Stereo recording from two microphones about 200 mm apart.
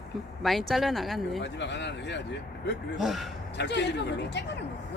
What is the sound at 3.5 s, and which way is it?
Speech, 60° left (ahead or behind).